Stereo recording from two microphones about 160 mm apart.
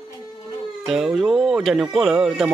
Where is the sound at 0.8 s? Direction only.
5° right (ahead or behind).